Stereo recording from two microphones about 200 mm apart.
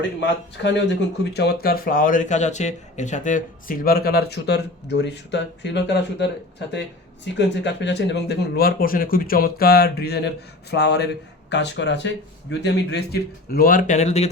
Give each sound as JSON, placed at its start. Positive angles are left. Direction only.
{"t": 0.5, "sound": "speech", "side_deg": 60}
{"t": 7.3, "sound": "speech", "side_deg": 60}